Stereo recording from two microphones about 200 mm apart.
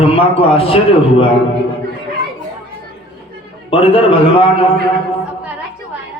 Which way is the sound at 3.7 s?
25° left (ahead or behind).